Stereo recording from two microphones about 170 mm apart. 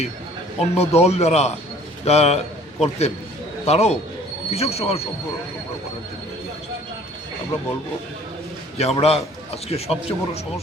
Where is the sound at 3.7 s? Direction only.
40° left (ahead or behind).